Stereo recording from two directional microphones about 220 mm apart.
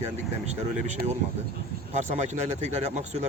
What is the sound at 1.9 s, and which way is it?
Speech, 30° right (ahead or behind).